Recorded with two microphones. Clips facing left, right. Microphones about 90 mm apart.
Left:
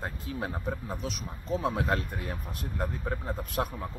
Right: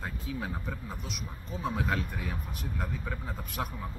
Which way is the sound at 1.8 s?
45° left (ahead or behind).